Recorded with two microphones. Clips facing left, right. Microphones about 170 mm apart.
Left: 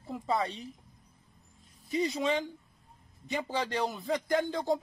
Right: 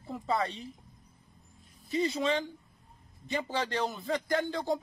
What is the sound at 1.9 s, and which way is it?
A man's voice, 15° left (ahead or behind).